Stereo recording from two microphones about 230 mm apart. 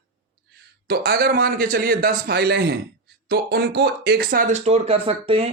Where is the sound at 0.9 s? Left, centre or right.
Right.